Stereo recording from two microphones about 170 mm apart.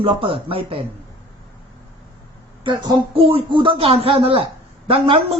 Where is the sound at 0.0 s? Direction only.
35° right (ahead or behind).